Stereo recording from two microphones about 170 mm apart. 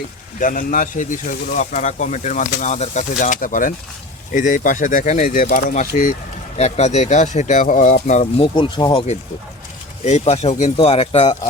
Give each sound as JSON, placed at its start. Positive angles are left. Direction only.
{"t": 0.3, "sound": "speech", "side_deg": 50}
{"t": 8.5, "sound": "speech", "side_deg": 30}
{"t": 10.0, "sound": "speech", "side_deg": 40}